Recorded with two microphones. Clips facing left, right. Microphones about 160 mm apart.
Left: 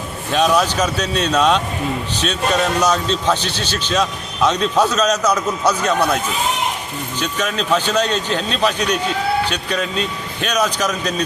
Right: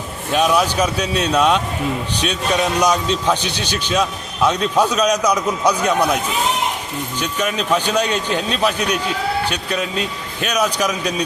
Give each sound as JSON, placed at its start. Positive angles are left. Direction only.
{"t": 0.3, "sound": "a man's voice", "side_deg": -10}
{"t": 7.2, "sound": "a man's voice", "side_deg": -10}